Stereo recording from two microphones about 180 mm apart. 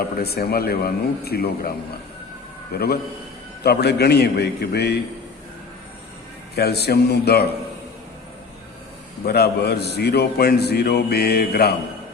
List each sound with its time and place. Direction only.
0.0 s a man's voice: 60° left (ahead or behind)
2.7 s a man's voice: 60° left (ahead or behind)
6.6 s a man's voice: 65° left (ahead or behind)
9.2 s a man's voice: 60° left (ahead or behind)